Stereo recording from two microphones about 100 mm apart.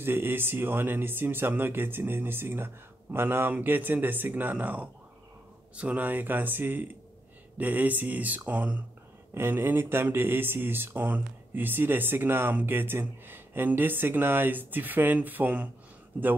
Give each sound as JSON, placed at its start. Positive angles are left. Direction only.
{"t": 0.0, "sound": "speech", "side_deg": -20}
{"t": 9.3, "sound": "speech", "side_deg": -25}